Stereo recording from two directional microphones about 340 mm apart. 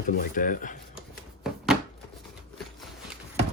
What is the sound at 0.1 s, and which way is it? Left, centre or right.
Speech, left.